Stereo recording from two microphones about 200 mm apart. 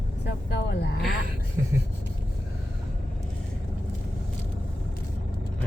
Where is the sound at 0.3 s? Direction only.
55° left (ahead or behind).